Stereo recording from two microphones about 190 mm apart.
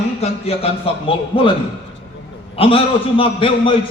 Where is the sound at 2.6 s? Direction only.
30° left (ahead or behind).